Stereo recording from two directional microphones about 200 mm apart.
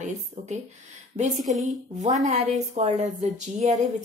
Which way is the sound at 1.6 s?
35° right (ahead or behind).